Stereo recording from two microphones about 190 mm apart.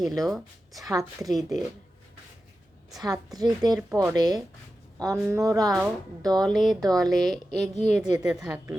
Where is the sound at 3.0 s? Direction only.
20° right (ahead or behind).